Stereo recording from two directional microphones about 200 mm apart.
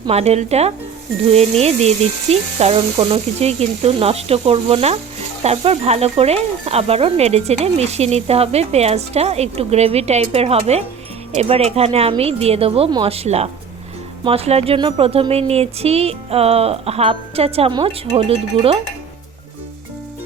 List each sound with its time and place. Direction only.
0.0 s speech: 30° right (ahead or behind)